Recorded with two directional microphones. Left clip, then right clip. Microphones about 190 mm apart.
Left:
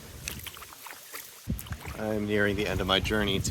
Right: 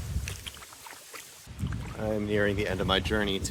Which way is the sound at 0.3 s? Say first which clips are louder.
Left 2 dB; 40° left (ahead or behind).